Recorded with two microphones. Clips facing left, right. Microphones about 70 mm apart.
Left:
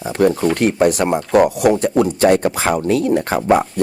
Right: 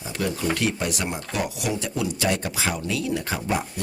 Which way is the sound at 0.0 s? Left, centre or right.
Left.